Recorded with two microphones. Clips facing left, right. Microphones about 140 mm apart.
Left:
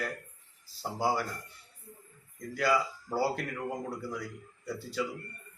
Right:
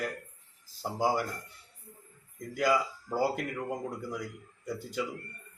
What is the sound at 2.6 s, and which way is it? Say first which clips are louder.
Speech: right 1 dB; 15° right (ahead or behind).